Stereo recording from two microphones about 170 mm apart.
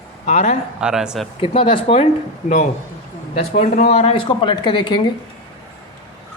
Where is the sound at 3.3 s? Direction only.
40° left (ahead or behind).